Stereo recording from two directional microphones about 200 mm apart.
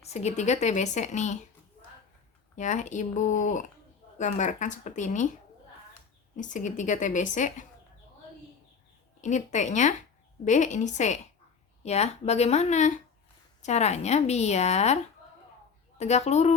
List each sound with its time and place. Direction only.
0.0 s a woman's voice: 35° left (ahead or behind)
2.6 s a woman's voice: 35° left (ahead or behind)
6.3 s a woman's voice: 40° left (ahead or behind)
9.2 s a woman's voice: 35° left (ahead or behind)
16.0 s a woman's voice: 35° left (ahead or behind)